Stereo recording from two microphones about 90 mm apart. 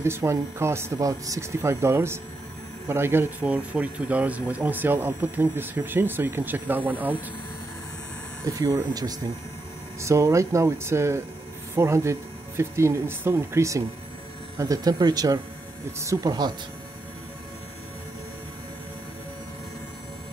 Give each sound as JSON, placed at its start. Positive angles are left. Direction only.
{"t": 0.0, "sound": "speech", "side_deg": -30}
{"t": 0.9, "sound": "speech", "side_deg": -40}
{"t": 8.5, "sound": "speech", "side_deg": -40}
{"t": 9.9, "sound": "speech", "side_deg": -30}